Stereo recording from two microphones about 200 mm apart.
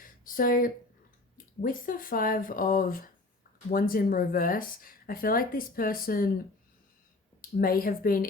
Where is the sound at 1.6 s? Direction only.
45° left (ahead or behind).